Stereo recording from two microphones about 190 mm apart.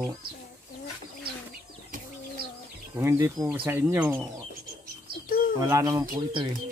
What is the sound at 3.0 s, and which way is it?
Speech, 15° right (ahead or behind).